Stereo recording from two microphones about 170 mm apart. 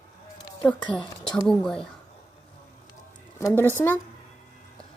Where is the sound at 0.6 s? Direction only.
10° left (ahead or behind).